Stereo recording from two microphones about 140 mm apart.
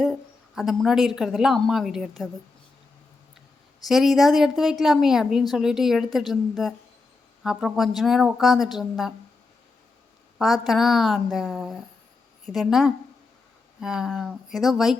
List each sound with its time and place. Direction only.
0.0 s speech: centre (ahead or behind)
3.8 s a woman's voice: centre (ahead or behind)
10.3 s a woman's voice: centre (ahead or behind)